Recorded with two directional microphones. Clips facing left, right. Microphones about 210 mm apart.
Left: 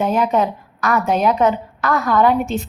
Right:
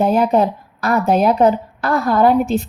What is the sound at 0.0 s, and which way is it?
A woman's voice, 35° right (ahead or behind).